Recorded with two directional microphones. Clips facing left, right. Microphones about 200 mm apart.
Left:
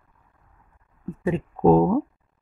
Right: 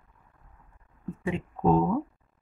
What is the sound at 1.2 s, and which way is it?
Speech, 40° left (ahead or behind).